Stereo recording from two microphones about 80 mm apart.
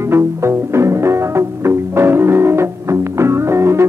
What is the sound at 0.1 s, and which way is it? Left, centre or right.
Music, right.